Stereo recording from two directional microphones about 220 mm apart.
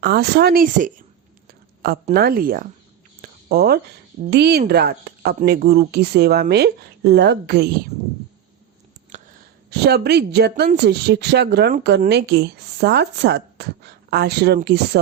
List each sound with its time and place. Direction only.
0.0 s a woman's voice: 45° right (ahead or behind)
2.1 s speech: 45° right (ahead or behind)
3.2 s a sound: 45° right (ahead or behind)
4.3 s a woman's voice: 50° right (ahead or behind)
9.6 s a woman's voice: 45° right (ahead or behind)